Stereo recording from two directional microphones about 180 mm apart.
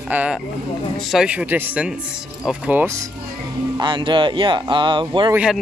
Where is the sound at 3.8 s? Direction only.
25° right (ahead or behind).